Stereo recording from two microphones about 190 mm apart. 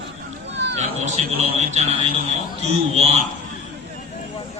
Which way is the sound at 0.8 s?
35° right (ahead or behind).